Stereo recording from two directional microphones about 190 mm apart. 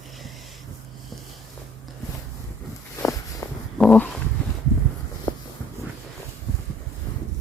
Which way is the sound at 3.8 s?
5° left (ahead or behind).